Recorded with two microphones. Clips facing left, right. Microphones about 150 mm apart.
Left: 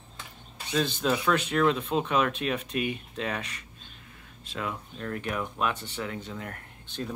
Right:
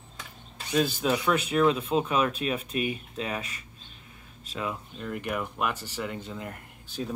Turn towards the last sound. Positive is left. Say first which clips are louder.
# right 1 dB
turn(degrees=-5)  # may be behind; listen again after turning